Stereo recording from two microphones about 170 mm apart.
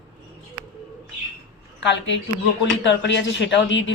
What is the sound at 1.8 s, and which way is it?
Speech, 90° left.